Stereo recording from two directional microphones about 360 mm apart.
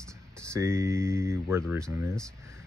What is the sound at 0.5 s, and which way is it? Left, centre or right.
Speech, centre.